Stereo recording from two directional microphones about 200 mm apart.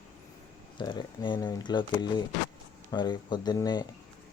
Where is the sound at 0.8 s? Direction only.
25° left (ahead or behind).